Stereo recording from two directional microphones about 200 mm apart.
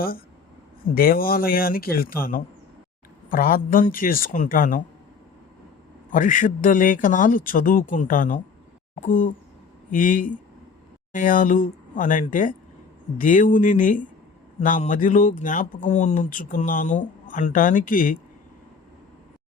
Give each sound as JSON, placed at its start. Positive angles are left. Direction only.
{"t": 0.9, "sound": "speech", "side_deg": 45}
{"t": 6.1, "sound": "speech", "side_deg": 40}